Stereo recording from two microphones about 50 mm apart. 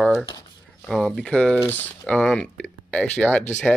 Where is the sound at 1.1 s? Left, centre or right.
Left.